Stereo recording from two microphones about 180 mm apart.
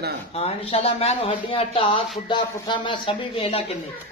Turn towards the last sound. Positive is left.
turn(degrees=30)  # may be behind; listen again after turning